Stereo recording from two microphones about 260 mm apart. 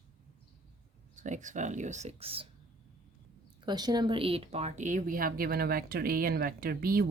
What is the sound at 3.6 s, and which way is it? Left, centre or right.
Speech, centre.